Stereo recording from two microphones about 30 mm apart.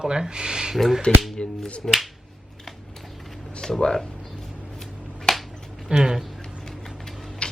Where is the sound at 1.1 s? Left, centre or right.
Left.